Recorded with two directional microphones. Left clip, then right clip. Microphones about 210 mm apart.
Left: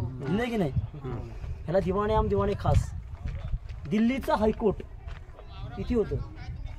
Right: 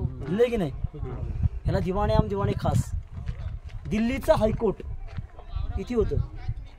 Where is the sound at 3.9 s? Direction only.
55° right (ahead or behind).